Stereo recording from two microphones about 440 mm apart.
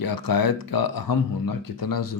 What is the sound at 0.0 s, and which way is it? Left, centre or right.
Speech, left.